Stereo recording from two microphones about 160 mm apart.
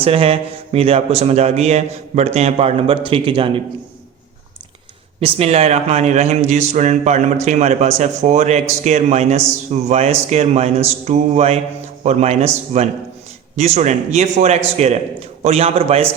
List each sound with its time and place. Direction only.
0.0 s speech: 35° right (ahead or behind)
5.2 s speech: 40° right (ahead or behind)